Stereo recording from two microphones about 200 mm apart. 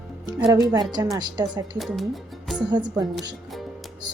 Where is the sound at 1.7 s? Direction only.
Centre (ahead or behind).